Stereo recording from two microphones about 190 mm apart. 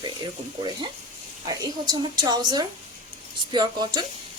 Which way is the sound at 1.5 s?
20° right (ahead or behind).